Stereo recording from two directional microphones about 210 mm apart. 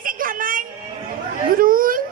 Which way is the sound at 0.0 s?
40° right (ahead or behind).